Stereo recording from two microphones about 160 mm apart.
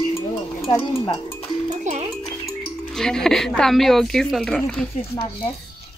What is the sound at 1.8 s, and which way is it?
Music, 45° right (ahead or behind).